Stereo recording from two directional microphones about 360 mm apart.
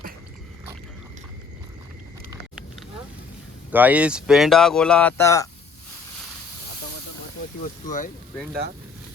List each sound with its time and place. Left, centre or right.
3.7 s speech: centre
7.6 s speech: left